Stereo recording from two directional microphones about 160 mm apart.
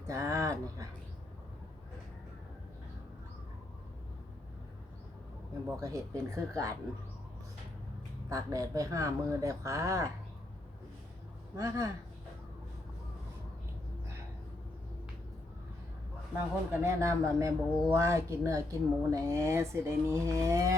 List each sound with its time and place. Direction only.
0.1 s speech: 20° right (ahead or behind)
5.7 s speech: 20° right (ahead or behind)
8.3 s speech: 20° right (ahead or behind)
11.5 s speech: 20° right (ahead or behind)
16.3 s speech: 15° right (ahead or behind)